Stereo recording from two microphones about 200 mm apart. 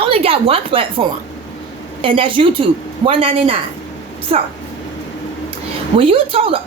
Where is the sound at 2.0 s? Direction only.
25° right (ahead or behind).